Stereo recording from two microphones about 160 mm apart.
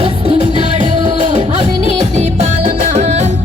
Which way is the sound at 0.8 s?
50° right (ahead or behind).